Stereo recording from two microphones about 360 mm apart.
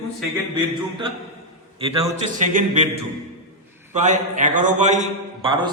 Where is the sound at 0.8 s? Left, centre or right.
Centre.